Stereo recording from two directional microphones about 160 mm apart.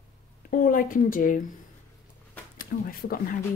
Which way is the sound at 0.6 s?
60° left (ahead or behind).